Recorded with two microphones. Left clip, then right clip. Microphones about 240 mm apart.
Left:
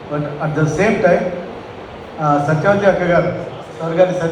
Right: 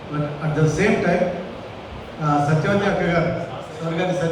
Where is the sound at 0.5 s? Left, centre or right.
Centre.